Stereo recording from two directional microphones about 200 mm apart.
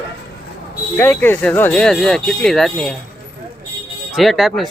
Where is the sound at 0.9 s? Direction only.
10° left (ahead or behind).